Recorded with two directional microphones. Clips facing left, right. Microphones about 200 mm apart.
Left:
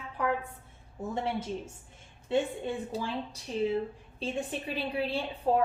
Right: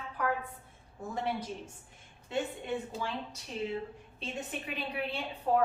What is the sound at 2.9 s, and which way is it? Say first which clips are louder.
A woman's voice: left 3 dB; 35° left (ahead or behind).